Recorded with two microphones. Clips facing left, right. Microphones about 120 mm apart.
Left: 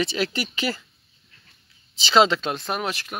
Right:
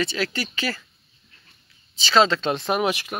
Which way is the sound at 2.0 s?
15° left (ahead or behind).